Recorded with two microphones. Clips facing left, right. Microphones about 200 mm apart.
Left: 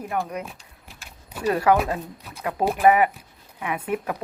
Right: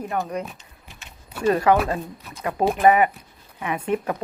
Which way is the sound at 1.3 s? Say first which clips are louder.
Right 2 dB; 10° left (ahead or behind).